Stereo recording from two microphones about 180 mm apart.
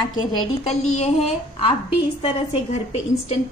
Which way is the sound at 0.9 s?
35° left (ahead or behind).